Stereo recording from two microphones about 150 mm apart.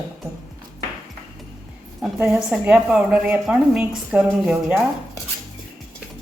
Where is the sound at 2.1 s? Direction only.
10° right (ahead or behind).